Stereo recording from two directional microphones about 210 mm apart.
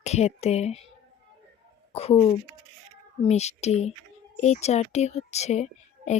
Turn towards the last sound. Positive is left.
turn(degrees=35)  # may be behind; listen again after turning